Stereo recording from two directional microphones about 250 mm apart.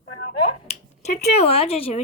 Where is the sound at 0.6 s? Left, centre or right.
Left.